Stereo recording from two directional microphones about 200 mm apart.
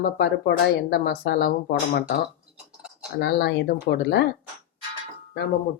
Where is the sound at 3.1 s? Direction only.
55° left (ahead or behind).